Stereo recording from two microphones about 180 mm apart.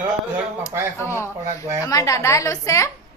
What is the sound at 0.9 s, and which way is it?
A woman's voice, 15° left (ahead or behind).